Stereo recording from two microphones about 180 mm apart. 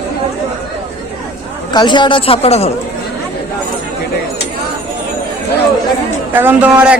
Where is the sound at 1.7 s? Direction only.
25° left (ahead or behind).